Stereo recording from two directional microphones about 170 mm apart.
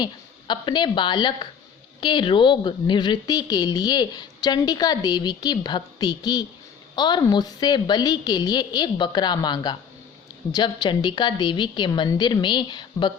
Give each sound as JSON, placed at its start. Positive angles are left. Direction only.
{"t": 0.0, "sound": "a woman's voice", "side_deg": 25}